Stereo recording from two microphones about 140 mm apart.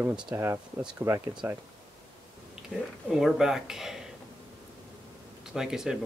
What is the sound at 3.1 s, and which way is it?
Speech, centre (ahead or behind).